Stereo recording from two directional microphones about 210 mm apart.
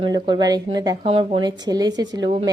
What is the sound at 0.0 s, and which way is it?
Speech, 20° right (ahead or behind).